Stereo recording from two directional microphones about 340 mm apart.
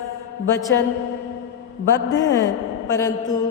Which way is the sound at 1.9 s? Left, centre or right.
Centre.